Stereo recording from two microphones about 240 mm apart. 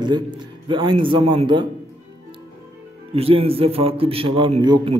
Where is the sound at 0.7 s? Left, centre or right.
Right.